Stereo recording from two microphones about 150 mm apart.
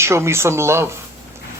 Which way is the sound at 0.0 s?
15° right (ahead or behind).